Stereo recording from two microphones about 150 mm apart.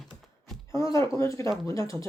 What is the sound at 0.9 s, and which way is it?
Speech, 20° left (ahead or behind).